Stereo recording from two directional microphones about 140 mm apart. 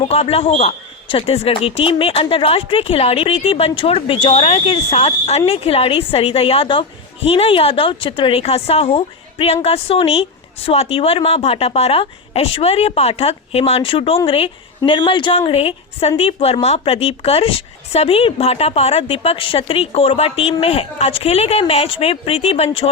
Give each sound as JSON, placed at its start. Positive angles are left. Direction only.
{"t": 0.0, "sound": "a woman's voice", "side_deg": 45}